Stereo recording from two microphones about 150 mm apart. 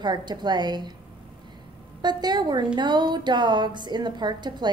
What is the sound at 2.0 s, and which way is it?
A woman's voice, 30° right (ahead or behind).